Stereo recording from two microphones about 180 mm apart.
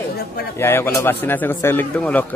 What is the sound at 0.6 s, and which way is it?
A man's voice, 15° left (ahead or behind).